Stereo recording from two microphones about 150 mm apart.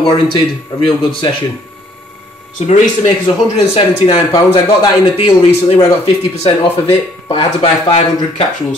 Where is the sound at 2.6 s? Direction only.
55° left (ahead or behind).